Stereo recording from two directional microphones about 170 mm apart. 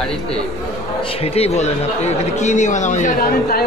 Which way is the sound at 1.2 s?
40° left (ahead or behind).